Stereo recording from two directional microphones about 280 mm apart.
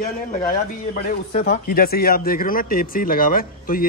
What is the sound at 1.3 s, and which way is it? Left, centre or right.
Speech, left.